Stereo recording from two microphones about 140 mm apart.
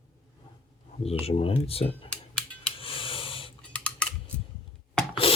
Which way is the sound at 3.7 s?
10° left (ahead or behind).